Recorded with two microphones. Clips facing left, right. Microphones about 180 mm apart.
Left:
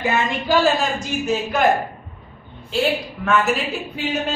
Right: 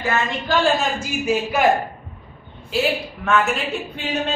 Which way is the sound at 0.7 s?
5° right (ahead or behind).